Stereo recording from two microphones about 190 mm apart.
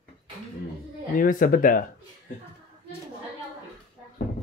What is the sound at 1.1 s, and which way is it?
Speech, 45° left (ahead or behind).